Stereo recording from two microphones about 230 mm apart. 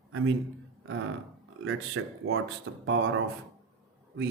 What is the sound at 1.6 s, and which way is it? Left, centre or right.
Speech, right.